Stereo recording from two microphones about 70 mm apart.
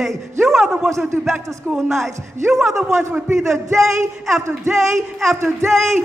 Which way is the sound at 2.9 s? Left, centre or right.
Right.